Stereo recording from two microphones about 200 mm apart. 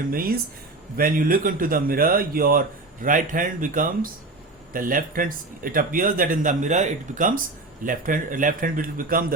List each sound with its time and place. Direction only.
0.1 s speech: 45° right (ahead or behind)